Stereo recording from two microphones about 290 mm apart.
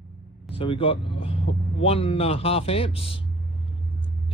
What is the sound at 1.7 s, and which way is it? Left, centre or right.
Speech, centre.